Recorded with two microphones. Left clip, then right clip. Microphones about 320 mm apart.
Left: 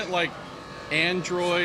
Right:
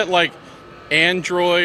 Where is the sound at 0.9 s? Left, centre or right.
Right.